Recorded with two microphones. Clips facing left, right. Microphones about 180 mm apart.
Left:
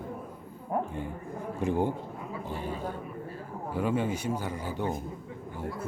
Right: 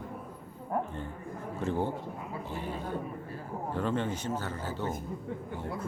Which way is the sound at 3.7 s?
10° left (ahead or behind).